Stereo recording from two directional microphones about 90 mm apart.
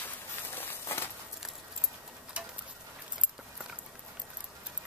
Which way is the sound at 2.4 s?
10° right (ahead or behind).